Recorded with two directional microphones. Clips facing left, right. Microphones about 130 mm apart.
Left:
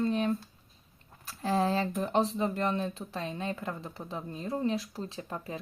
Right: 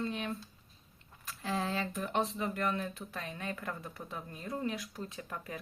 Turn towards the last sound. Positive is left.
turn(degrees=25)  # may be behind; listen again after turning